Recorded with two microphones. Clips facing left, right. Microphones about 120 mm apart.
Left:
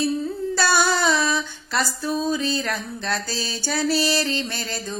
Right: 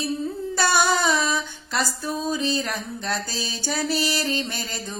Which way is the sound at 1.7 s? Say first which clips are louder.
Left 2 dB; 10° right (ahead or behind).